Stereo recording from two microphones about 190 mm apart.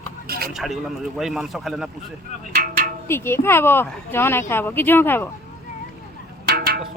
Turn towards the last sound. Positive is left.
turn(degrees=-55)  # may be behind; listen again after turning